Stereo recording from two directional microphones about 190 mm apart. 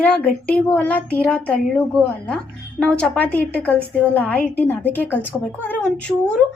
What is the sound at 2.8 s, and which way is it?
A woman's voice, 5° left (ahead or behind).